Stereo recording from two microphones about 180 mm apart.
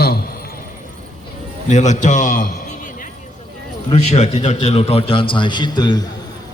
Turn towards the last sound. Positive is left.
turn(degrees=25)  # may be behind; listen again after turning